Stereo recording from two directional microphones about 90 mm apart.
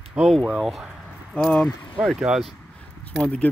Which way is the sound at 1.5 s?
15° left (ahead or behind).